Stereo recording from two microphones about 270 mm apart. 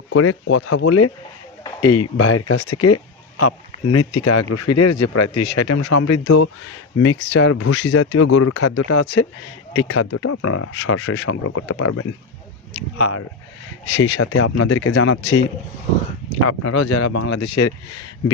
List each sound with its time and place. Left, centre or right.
0.1 s speech: left
0.7 s speech: left
7.0 s speech: left
11.4 s speech: left
13.9 s speech: left
16.4 s speech: left